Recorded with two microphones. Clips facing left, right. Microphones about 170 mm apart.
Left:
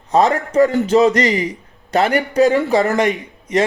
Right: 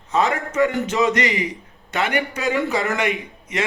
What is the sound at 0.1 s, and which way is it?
A man's voice, 40° left (ahead or behind).